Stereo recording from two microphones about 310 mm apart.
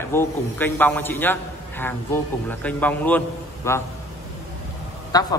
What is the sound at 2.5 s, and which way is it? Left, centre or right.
A man's voice, centre.